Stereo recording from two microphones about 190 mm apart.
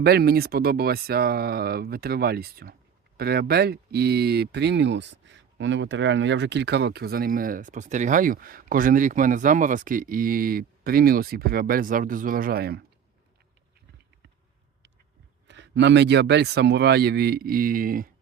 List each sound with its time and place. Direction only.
0.0 s speech: 55° right (ahead or behind)
15.4 s speech: 70° right (ahead or behind); by 18.1 s 50° right (ahead or behind)